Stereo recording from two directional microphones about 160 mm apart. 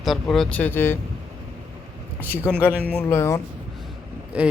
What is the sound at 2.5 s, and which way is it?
Speech, 15° left (ahead or behind).